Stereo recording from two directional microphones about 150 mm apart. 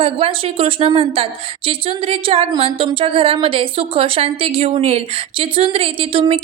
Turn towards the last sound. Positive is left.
turn(degrees=-40)  # may be behind; listen again after turning